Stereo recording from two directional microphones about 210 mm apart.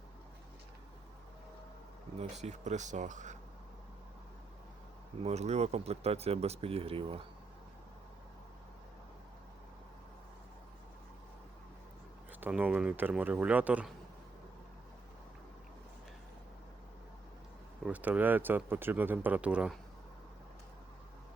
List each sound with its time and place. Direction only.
2.1 s speech: 30° right (ahead or behind)
5.2 s speech: 30° right (ahead or behind)
12.4 s speech: 5° right (ahead or behind)
17.8 s speech: 5° right (ahead or behind)